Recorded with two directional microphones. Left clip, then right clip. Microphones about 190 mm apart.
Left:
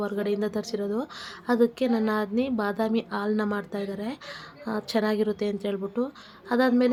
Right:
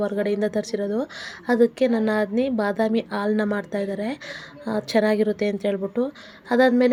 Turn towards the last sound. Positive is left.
turn(degrees=-15)  # may be behind; listen again after turning